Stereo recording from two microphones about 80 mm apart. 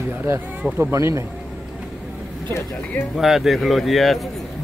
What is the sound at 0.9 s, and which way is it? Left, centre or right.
Speech, right.